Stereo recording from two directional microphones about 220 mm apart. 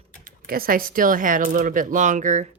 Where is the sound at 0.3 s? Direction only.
40° right (ahead or behind).